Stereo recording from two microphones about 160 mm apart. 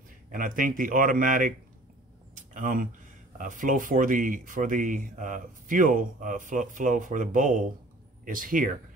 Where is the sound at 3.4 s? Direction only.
55° right (ahead or behind).